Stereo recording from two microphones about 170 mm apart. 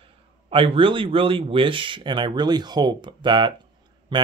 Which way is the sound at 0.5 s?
30° right (ahead or behind).